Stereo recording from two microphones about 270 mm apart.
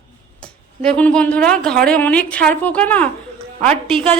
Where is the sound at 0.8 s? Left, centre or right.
Centre.